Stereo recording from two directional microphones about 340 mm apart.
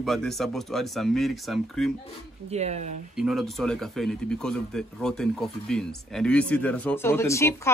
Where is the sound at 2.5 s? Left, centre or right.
Centre.